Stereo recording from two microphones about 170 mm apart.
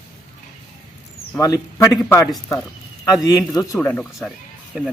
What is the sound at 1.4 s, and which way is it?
Speech, 20° left (ahead or behind).